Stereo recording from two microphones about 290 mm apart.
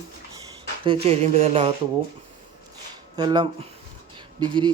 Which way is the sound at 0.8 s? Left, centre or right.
Centre.